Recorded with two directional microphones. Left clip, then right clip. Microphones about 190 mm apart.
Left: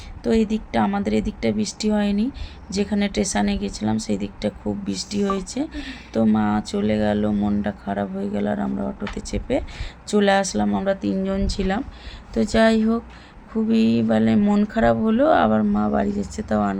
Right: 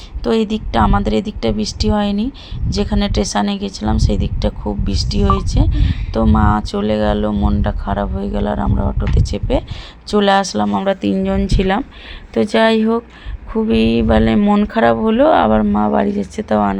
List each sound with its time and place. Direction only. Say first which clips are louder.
0.2 s speech: right 5 dB; centre (ahead or behind)
10.8 s speech: right 6 dB; 15° right (ahead or behind)